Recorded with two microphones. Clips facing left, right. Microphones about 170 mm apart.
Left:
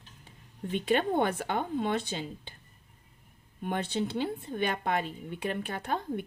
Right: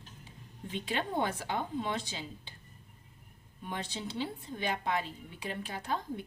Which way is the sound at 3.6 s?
55° left (ahead or behind).